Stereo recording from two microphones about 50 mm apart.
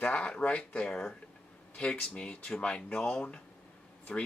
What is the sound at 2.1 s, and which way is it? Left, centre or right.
Speech, left.